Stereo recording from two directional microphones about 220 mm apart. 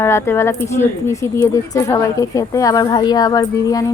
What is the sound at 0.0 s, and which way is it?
Speech, 10° left (ahead or behind).